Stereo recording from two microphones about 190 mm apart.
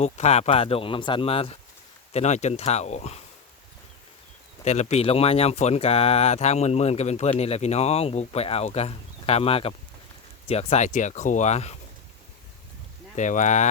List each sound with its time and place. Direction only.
0.0 s speech: 35° left (ahead or behind)
4.6 s speech: 35° left (ahead or behind)
13.1 s speech: 40° left (ahead or behind)